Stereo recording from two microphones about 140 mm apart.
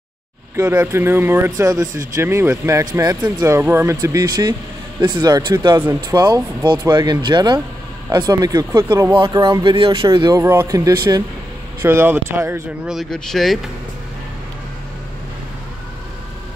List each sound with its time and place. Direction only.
0.6 s speech: 20° right (ahead or behind)
12.8 s speech: centre (ahead or behind)